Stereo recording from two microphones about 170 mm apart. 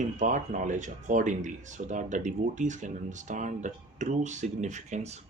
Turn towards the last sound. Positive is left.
turn(degrees=-45)  # may be behind; listen again after turning